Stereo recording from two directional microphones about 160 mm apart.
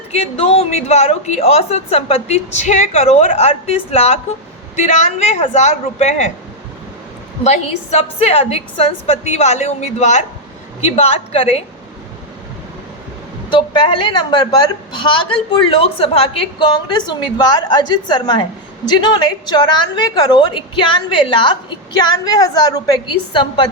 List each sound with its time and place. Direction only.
0.1 s a woman's voice: 40° left (ahead or behind)
7.4 s a woman's voice: 45° left (ahead or behind)
13.5 s a woman's voice: 30° left (ahead or behind)